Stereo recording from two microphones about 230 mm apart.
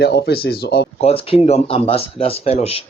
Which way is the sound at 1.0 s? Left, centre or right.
Left.